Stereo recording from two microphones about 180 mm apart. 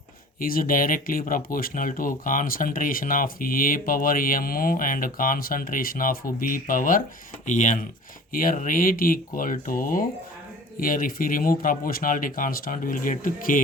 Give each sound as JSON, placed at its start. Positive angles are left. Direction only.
{"t": 0.3, "sound": "speech", "side_deg": 55}